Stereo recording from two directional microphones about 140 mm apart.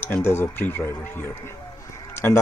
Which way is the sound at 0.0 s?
15° left (ahead or behind).